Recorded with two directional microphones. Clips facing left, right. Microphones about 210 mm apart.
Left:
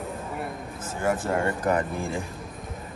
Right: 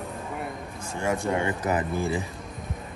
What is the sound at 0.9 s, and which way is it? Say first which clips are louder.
Speech: left 1 dB; centre (ahead or behind).